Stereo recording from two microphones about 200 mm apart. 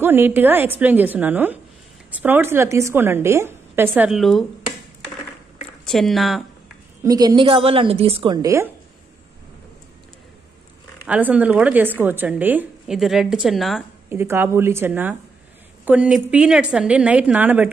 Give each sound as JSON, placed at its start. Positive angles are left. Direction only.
{"t": 0.0, "sound": "a woman's voice", "side_deg": -10}
{"t": 5.9, "sound": "speech", "side_deg": 0}
{"t": 7.0, "sound": "a woman's voice", "side_deg": -20}
{"t": 11.1, "sound": "a woman's voice", "side_deg": -10}
{"t": 14.0, "sound": "a woman's voice", "side_deg": -10}